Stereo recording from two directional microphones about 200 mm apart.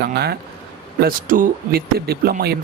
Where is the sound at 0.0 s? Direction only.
55° right (ahead or behind).